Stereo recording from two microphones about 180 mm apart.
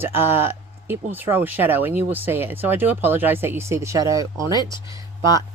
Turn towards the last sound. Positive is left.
turn(degrees=20)  # may be behind; listen again after turning